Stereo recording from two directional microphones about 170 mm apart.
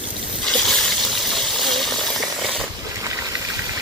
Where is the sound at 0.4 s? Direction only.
5° left (ahead or behind).